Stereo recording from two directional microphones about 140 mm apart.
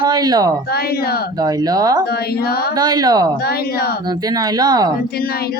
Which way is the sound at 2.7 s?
30° right (ahead or behind).